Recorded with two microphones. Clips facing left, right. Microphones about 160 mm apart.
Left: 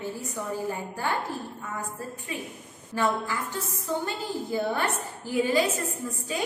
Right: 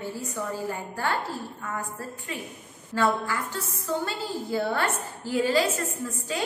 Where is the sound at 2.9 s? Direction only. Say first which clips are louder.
Right 2 dB; 20° left (ahead or behind).